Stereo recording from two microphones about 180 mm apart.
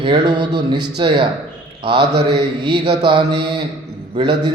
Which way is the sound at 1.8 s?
30° right (ahead or behind).